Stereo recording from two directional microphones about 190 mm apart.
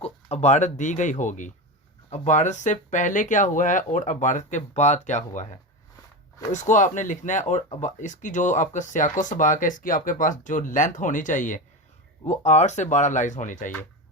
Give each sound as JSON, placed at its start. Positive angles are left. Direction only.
{"t": 0.0, "sound": "speech", "side_deg": 35}